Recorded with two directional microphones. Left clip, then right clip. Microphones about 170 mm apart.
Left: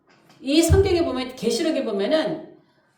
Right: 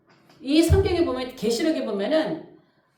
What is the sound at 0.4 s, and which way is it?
Speech, 10° left (ahead or behind).